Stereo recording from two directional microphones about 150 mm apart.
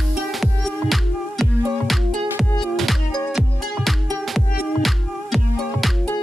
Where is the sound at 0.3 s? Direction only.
Centre (ahead or behind).